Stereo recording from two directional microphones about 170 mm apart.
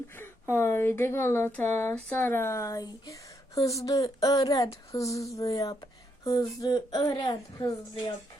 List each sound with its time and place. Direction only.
0.2 s speech: 15° left (ahead or behind)